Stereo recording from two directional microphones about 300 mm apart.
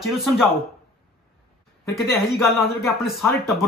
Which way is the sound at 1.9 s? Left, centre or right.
Centre.